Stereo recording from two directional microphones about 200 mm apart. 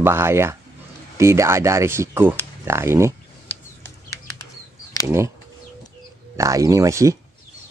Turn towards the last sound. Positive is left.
turn(degrees=-15)  # may be behind; listen again after turning